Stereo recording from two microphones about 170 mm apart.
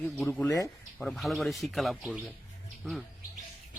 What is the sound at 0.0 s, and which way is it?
Speech, 5° left (ahead or behind).